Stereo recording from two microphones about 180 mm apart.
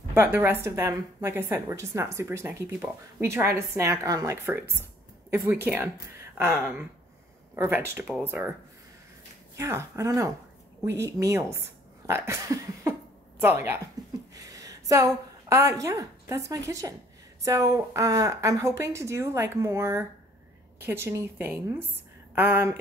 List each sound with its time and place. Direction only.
0.1 s a woman's voice: 15° right (ahead or behind)
9.6 s a woman's voice: 15° right (ahead or behind)